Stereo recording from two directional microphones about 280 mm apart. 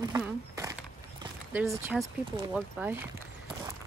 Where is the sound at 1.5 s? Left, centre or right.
Centre.